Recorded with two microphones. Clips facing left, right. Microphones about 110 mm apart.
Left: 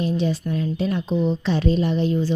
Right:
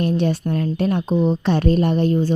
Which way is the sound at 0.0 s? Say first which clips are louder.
Right 3 dB; 60° right (ahead or behind).